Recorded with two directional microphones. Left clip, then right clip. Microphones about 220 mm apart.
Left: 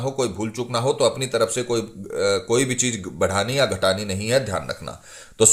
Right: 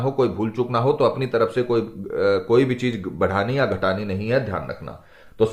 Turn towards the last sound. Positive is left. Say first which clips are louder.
# left 2 dB
turn(degrees=45)  # may be behind; listen again after turning